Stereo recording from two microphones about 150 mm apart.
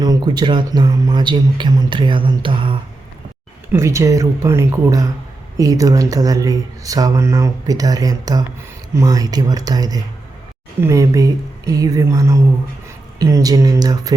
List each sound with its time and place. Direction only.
0.0 s speech: 30° right (ahead or behind)
3.7 s speech: 20° right (ahead or behind)